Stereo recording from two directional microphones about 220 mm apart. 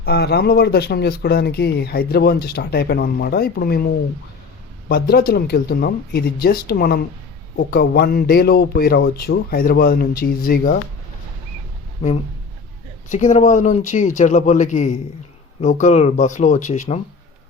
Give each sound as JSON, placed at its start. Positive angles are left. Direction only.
{"t": 0.0, "sound": "speech", "side_deg": 45}
{"t": 4.9, "sound": "speech", "side_deg": 40}
{"t": 13.1, "sound": "speech", "side_deg": 35}